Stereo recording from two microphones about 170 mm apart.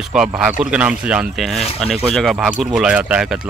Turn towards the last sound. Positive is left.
turn(degrees=-5)  # may be behind; listen again after turning